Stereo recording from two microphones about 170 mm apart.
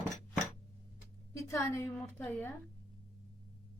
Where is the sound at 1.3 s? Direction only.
15° left (ahead or behind).